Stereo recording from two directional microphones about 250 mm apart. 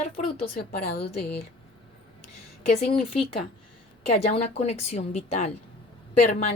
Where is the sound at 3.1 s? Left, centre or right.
Left.